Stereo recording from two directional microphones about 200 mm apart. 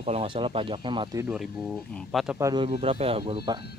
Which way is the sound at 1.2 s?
5° right (ahead or behind).